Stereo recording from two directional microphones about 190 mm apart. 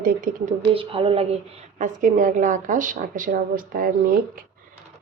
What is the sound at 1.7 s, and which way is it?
Speech, 40° right (ahead or behind).